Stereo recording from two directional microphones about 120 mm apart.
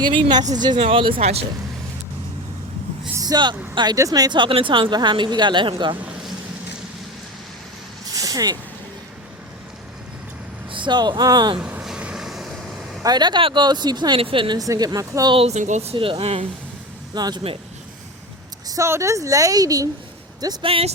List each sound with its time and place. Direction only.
0.0 s speech: 40° right (ahead or behind); by 1.5 s 55° right (ahead or behind)
3.2 s vehicle: 35° right (ahead or behind)
3.8 s a woman's voice: 30° right (ahead or behind)
8.1 s vehicle: 30° right (ahead or behind)
10.7 s speech: 40° right (ahead or behind)
11.5 s vehicle: 5° right (ahead or behind)
13.0 s a woman's voice: 35° right (ahead or behind)
14.2 s a woman's voice: 45° right (ahead or behind); by 15.4 s 30° right (ahead or behind)
15.4 s speech: 65° right (ahead or behind)
17.2 s a woman's voice: 35° right (ahead or behind)
18.7 s a woman's voice: 25° right (ahead or behind)
20.7 s speech: 50° right (ahead or behind)